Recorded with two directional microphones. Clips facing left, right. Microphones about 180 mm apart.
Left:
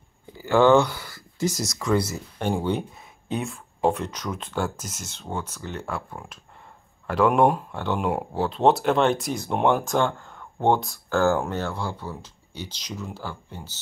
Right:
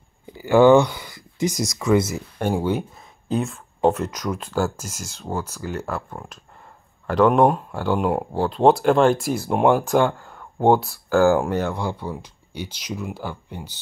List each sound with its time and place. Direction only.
0.4 s speech: 10° right (ahead or behind)
1.6 s speech: 5° right (ahead or behind)
2.0 s speech: 20° right (ahead or behind)
2.3 s speech: 5° right (ahead or behind)